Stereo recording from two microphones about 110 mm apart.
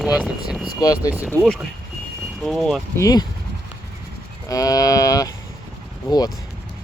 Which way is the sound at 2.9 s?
30° left (ahead or behind).